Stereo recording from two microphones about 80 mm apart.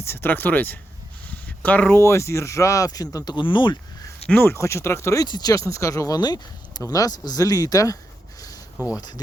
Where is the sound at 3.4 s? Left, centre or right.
Left.